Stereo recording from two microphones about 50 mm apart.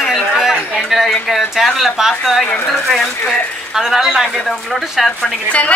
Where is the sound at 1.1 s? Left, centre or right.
Centre.